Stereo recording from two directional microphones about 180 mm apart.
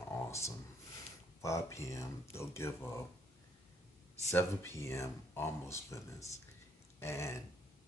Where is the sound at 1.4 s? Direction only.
15° left (ahead or behind).